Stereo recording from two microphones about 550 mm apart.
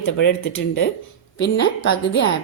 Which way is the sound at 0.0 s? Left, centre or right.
Centre.